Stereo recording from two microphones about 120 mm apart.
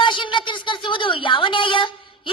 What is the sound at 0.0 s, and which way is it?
Speech, 45° left (ahead or behind).